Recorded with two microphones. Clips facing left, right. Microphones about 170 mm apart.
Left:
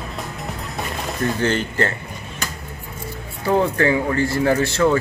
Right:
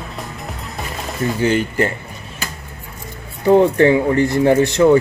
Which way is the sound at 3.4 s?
20° right (ahead or behind).